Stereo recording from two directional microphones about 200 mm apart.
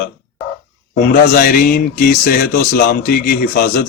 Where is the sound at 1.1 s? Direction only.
50° left (ahead or behind).